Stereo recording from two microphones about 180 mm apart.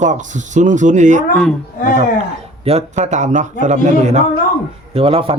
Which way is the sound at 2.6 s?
35° right (ahead or behind).